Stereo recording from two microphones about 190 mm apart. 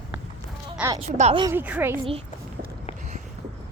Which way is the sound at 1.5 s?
10° right (ahead or behind).